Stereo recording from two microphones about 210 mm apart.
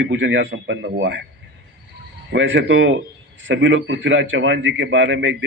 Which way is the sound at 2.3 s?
60° right (ahead or behind).